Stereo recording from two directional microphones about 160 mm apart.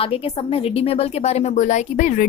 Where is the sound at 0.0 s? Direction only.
35° left (ahead or behind).